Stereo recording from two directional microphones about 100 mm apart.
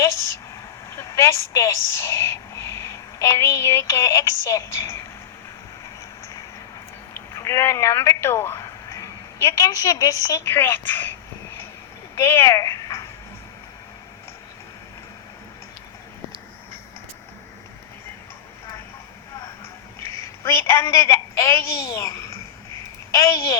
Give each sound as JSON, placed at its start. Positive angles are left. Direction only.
{"t": 0.0, "sound": "a woman's voice", "side_deg": 25}
{"t": 7.1, "sound": "a woman's voice", "side_deg": 30}
{"t": 12.1, "sound": "speech", "side_deg": 25}
{"t": 20.0, "sound": "a woman's voice", "side_deg": 25}